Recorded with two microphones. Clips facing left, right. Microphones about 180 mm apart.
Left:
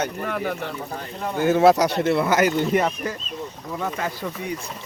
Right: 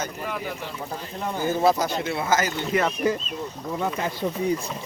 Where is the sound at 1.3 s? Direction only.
70° left (ahead or behind).